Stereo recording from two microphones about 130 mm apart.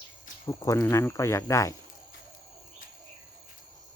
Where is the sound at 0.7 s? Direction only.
15° left (ahead or behind).